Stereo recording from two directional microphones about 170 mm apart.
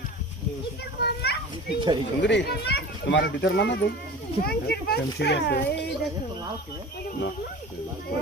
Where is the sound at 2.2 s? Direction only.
80° left.